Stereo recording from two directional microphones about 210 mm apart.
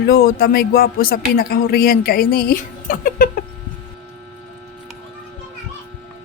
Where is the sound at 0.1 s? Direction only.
45° left (ahead or behind).